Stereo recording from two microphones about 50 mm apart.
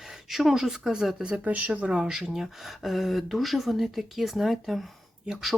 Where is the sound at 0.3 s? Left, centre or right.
Centre.